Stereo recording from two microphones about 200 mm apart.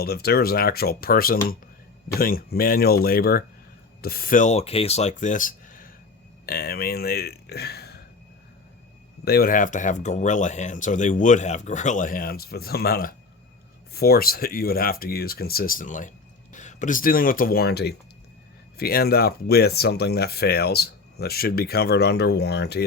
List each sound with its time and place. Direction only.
0.0 s speech: 50° left (ahead or behind)
9.2 s speech: 50° left (ahead or behind)